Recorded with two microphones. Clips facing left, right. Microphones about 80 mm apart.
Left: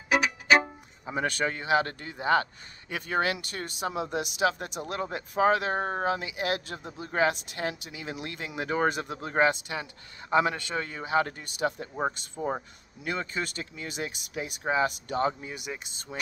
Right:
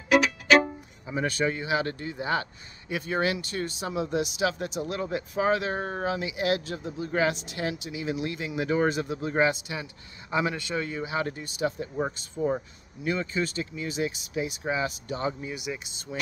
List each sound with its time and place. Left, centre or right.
0.1 s music: centre
1.0 s speech: left
12.4 s speech: left
13.0 s speech: left